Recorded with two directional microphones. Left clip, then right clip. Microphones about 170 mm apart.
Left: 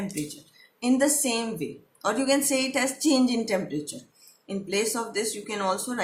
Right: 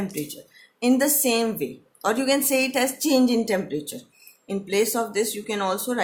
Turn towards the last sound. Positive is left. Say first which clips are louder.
# right 3 dB
turn(degrees=-40)  # may be behind; listen again after turning